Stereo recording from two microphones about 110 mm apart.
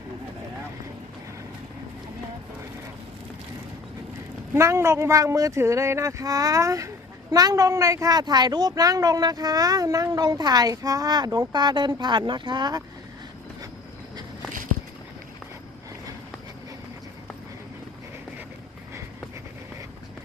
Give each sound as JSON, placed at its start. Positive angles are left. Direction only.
{"t": 4.5, "sound": "speech", "side_deg": -25}